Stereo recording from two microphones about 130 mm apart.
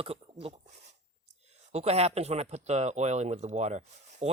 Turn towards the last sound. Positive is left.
turn(degrees=-60)  # may be behind; listen again after turning